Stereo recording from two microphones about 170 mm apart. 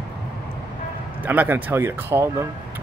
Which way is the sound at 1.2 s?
10° right (ahead or behind).